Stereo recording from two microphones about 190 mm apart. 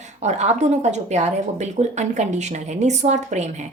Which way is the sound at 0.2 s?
35° right (ahead or behind).